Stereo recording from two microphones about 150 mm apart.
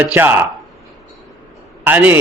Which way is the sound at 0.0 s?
15° right (ahead or behind).